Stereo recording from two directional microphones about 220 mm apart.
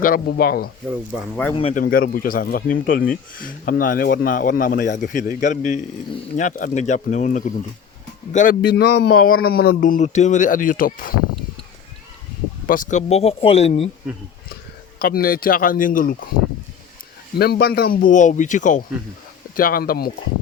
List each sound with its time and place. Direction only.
0.0 s speech: 40° left (ahead or behind)
1.5 s speech: 25° left (ahead or behind)
1.8 s speech: 40° left (ahead or behind)
12.6 s speech: 40° left (ahead or behind)
14.9 s speech: 40° left (ahead or behind)
17.3 s speech: 45° left (ahead or behind)